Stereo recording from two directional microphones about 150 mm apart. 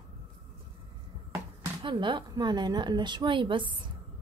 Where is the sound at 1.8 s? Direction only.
30° right (ahead or behind).